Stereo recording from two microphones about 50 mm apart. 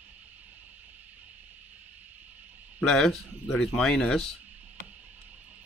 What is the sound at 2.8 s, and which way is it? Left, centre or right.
A man's voice, centre.